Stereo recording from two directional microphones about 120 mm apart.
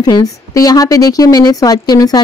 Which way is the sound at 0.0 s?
30° left (ahead or behind).